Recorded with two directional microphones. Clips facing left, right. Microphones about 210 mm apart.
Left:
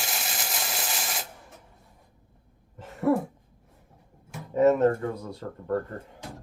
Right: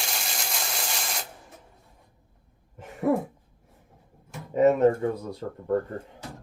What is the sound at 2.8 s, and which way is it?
Throat clearing, 15° right (ahead or behind).